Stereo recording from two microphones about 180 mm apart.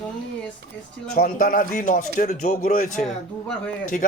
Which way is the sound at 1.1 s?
50° left (ahead or behind).